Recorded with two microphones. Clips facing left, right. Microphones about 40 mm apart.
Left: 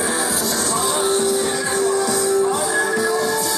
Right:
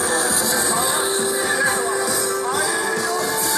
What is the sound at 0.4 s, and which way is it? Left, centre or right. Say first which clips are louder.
Music: right 1 dB; right.